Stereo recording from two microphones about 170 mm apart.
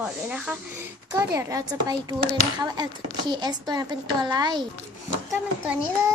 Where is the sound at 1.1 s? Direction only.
20° right (ahead or behind).